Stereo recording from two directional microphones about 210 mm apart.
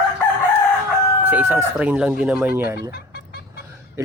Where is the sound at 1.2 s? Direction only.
10° right (ahead or behind).